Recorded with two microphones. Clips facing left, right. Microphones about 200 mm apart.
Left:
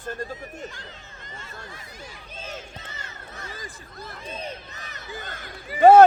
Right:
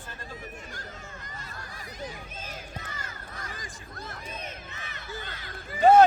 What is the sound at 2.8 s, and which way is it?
Crowd, 25° left (ahead or behind).